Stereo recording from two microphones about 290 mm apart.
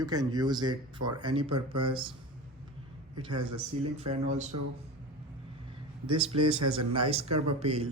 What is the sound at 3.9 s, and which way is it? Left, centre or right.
Speech, right.